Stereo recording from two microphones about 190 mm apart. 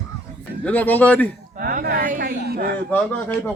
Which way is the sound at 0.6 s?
10° left (ahead or behind).